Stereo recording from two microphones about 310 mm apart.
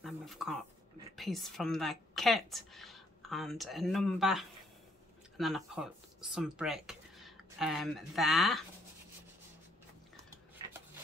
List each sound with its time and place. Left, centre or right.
0.0 s a sound: centre
1.1 s a woman's voice: centre
10.6 s shuffling cards: centre